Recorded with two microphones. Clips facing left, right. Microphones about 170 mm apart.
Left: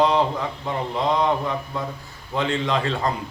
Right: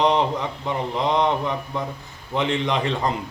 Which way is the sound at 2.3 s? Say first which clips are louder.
Even; 20° right (ahead or behind).